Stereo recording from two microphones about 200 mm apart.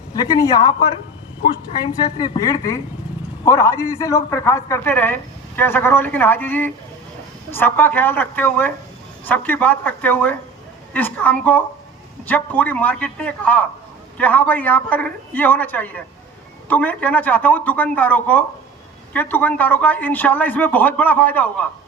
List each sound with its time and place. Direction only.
0.3 s a man's voice: 15° left (ahead or behind)
2.1 s a man's voice: 20° left (ahead or behind)